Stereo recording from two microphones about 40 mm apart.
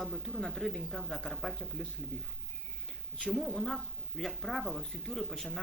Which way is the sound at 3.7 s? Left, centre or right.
Centre.